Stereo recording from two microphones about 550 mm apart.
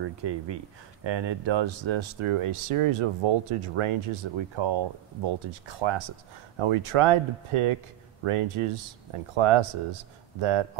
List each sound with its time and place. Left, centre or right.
0.0 s speech: right